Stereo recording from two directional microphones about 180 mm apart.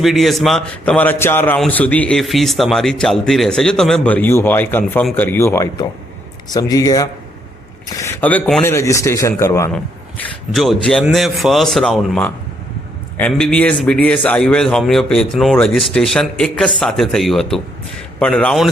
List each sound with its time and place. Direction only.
0.0 s a man's voice: centre (ahead or behind); by 9.7 s 15° left (ahead or behind)
9.7 s a man's voice: centre (ahead or behind)